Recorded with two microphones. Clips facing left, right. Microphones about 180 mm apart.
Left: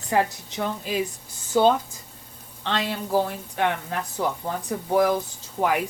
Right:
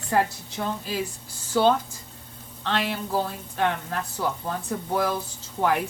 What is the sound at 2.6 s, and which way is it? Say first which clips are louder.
A woman's voice: even; 15° left (ahead or behind).